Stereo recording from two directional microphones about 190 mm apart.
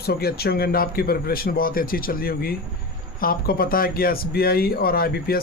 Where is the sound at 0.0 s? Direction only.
55° left (ahead or behind).